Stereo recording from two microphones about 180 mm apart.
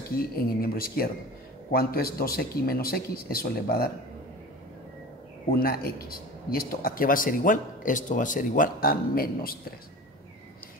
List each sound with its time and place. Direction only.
0.4 s speech: 55° left (ahead or behind)
5.5 s a man's voice: 55° left (ahead or behind)